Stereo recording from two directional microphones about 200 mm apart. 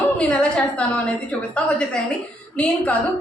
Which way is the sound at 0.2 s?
5° left (ahead or behind).